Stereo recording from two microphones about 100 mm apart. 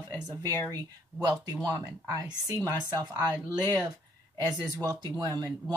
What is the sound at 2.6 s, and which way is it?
Speech, 40° right (ahead or behind).